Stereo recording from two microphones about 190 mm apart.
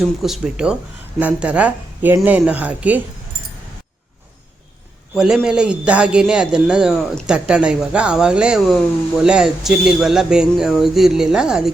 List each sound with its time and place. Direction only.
0.0 s a man's voice: centre (ahead or behind)
5.1 s a man's voice: centre (ahead or behind)